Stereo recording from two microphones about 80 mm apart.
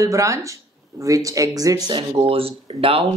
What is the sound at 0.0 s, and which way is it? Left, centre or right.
Speech, right.